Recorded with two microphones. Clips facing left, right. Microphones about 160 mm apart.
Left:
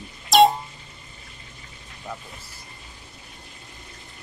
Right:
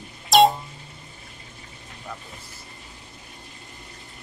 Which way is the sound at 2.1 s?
10° left (ahead or behind).